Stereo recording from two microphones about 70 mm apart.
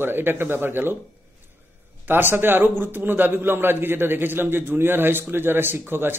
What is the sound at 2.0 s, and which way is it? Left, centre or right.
A man's voice, right.